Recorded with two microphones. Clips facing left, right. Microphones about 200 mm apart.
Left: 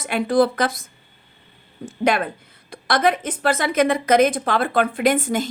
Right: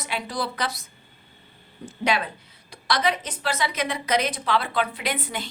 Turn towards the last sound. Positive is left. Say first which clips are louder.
# left 11 dB
turn(degrees=45)  # may be behind; listen again after turning